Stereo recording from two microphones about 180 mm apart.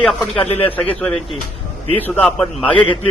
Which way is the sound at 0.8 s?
5° left (ahead or behind).